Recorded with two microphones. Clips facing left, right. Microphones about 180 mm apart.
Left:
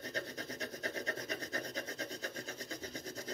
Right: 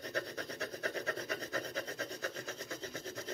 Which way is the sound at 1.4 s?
30° right (ahead or behind).